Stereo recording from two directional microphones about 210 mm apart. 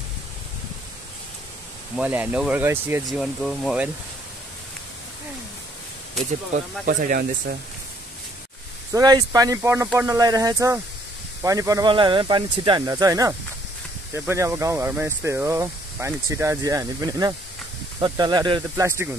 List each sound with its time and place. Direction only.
2.0 s speech: 5° right (ahead or behind)
3.1 s speech: centre (ahead or behind)
6.5 s speech: 40° right (ahead or behind)
8.9 s speech: 20° right (ahead or behind)